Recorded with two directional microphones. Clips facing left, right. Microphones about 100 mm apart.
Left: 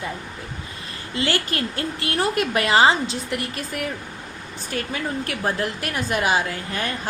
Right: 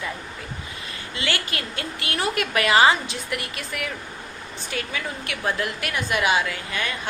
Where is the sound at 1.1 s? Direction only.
40° left (ahead or behind).